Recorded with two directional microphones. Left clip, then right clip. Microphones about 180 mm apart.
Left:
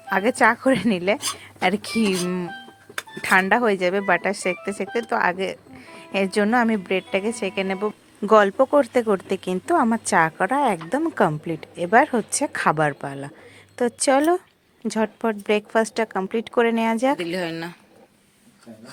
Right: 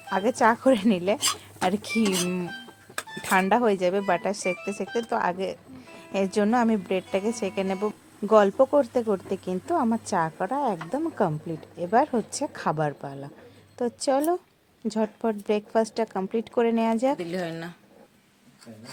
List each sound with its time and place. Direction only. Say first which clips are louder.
0.1 s speech: left 4 dB; 20° left (ahead or behind)
17.2 s speech: left 5 dB; 5° left (ahead or behind)